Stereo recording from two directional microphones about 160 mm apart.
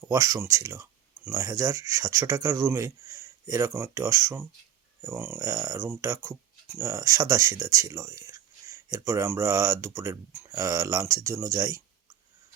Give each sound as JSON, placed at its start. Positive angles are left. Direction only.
{"t": 0.0, "sound": "speech", "side_deg": -20}